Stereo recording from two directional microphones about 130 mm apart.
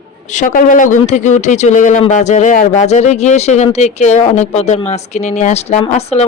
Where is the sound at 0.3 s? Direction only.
80° left.